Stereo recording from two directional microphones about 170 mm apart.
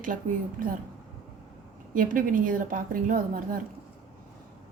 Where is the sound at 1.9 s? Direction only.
55° right (ahead or behind).